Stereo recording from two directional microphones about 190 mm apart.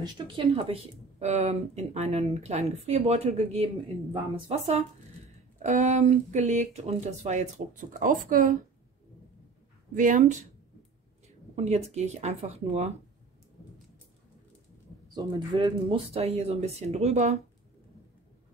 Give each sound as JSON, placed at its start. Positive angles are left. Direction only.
{"t": 0.0, "sound": "speech", "side_deg": -30}
{"t": 9.9, "sound": "speech", "side_deg": -45}
{"t": 15.1, "sound": "speech", "side_deg": -20}